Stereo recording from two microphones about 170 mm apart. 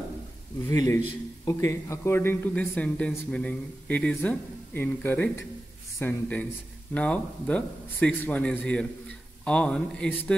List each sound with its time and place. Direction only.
0.7 s a man's voice: 20° left (ahead or behind)